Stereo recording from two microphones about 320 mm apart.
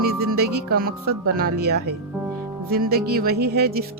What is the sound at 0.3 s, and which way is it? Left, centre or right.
Speech, right.